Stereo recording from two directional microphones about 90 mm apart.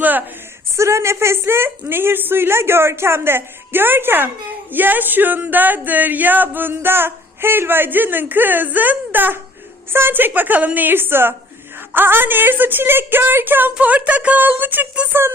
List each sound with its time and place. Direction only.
0.0 s a woman's voice: 20° right (ahead or behind)
0.8 s speech: 30° right (ahead or behind)